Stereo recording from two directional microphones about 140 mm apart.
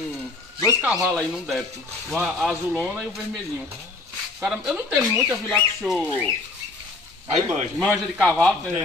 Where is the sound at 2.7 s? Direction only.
15° right (ahead or behind).